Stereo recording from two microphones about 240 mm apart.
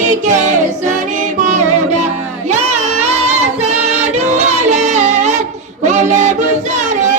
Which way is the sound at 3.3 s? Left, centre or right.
Right.